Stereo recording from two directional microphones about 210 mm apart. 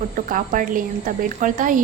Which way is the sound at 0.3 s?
40° right (ahead or behind).